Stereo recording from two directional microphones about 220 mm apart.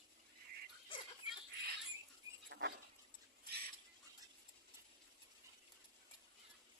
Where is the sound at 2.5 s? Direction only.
55° right (ahead or behind).